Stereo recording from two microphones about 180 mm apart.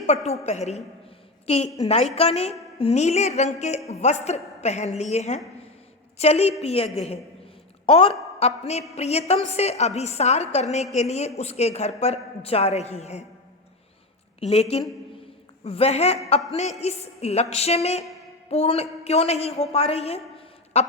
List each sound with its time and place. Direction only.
0.3 s a woman's voice: 40° left (ahead or behind)
14.4 s a woman's voice: 35° left (ahead or behind)